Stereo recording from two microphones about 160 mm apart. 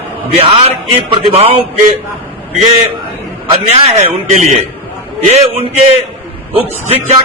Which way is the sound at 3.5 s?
45° right (ahead or behind).